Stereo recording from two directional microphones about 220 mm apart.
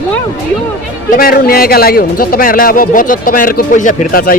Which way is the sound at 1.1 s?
40° left (ahead or behind).